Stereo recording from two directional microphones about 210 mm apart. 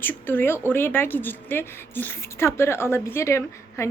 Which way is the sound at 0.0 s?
10° left (ahead or behind).